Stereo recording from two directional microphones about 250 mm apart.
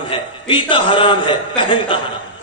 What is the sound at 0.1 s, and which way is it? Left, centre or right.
A man's voice, centre.